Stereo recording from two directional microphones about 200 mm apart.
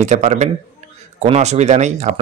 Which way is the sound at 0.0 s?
35° right (ahead or behind).